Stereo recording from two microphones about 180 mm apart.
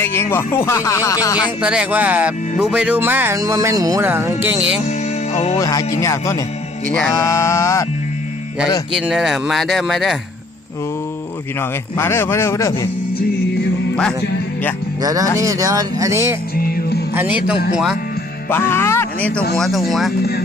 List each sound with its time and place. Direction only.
0.0 s speech: 15° left (ahead or behind)
1.6 s speech: 5° right (ahead or behind)
4.9 s music: 40° left (ahead or behind)
5.5 s speech: 15° left (ahead or behind)
9.0 s speech: centre (ahead or behind)
11.6 s speech: 15° left (ahead or behind)
15.0 s speech: 20° right (ahead or behind)
16.6 s music: 55° left (ahead or behind)
17.2 s speech: 10° right (ahead or behind)
18.4 s speech: 10° left (ahead or behind)